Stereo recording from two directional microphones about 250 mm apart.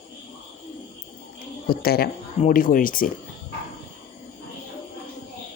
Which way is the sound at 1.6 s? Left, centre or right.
Left.